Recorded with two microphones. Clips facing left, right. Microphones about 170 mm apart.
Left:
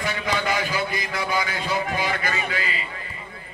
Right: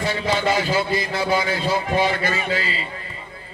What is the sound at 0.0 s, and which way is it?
A man's voice, 30° right (ahead or behind).